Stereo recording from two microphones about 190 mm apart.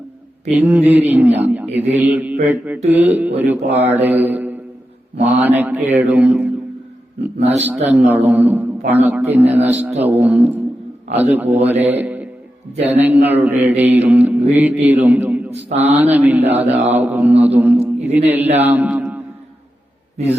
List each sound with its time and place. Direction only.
0.5 s speech: 10° right (ahead or behind)
3.9 s mantra: 10° right (ahead or behind)
5.2 s speech: 10° right (ahead or behind)
7.6 s a man's voice: 10° right (ahead or behind)
18.5 s mantra: 10° right (ahead or behind)